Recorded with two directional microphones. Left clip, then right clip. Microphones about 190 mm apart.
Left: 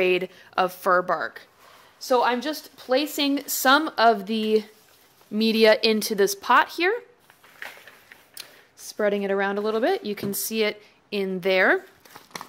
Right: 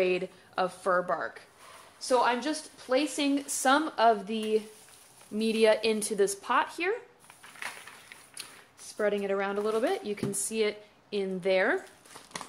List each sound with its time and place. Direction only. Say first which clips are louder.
0.0 s a woman's voice: left 6 dB; 35° left (ahead or behind)
8.9 s speech: left 5 dB; 45° left (ahead or behind)